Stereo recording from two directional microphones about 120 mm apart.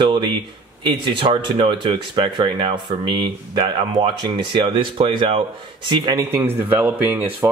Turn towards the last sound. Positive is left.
turn(degrees=-25)  # may be behind; listen again after turning